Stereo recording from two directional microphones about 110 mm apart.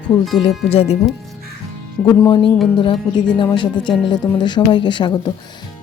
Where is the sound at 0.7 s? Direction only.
65° left (ahead or behind).